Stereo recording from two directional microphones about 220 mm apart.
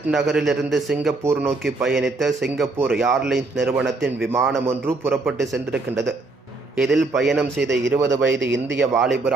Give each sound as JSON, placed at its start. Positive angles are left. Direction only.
{"t": 0.1, "sound": "a man's voice", "side_deg": 0}
{"t": 8.4, "sound": "speech", "side_deg": -55}
{"t": 9.0, "sound": "a man's voice", "side_deg": 0}